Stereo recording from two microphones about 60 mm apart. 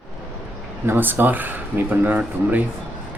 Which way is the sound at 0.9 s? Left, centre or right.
Right.